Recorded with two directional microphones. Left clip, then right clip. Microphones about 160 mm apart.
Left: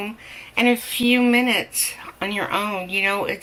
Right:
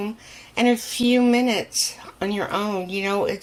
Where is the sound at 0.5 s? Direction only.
70° right (ahead or behind).